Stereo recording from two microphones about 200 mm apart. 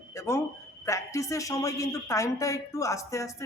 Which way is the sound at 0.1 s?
15° left (ahead or behind).